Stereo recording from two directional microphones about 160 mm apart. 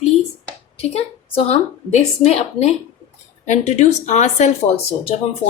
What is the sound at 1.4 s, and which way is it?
A woman's voice, 40° left (ahead or behind).